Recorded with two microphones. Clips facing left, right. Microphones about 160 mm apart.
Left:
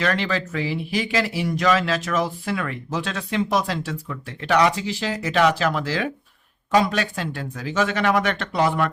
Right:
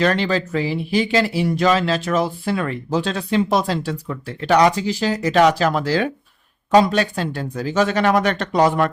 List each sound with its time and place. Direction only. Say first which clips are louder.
0.0 s speech: right 5 dB; 35° right (ahead or behind)